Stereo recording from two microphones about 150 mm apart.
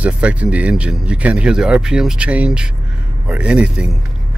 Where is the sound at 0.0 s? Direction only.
10° right (ahead or behind).